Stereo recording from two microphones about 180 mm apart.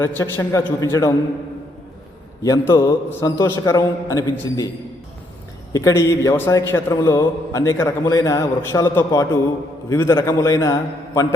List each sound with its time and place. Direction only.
0.0 s a man's voice: 15° left (ahead or behind)
2.4 s a man's voice: 15° left (ahead or behind)
5.7 s a man's voice: 15° left (ahead or behind)